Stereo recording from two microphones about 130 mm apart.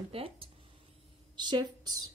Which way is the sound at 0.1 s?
45° right (ahead or behind).